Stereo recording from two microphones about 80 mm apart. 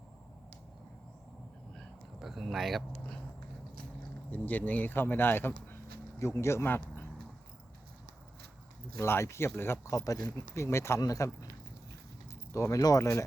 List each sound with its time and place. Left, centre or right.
1.7 s a sound: centre
4.3 s speech: left
6.1 s speech: left
9.0 s speech: left
9.9 s speech: left
11.0 s speech: left
12.5 s speech: left